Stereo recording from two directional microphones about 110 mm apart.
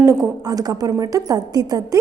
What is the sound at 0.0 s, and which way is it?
A woman's voice, 30° right (ahead or behind).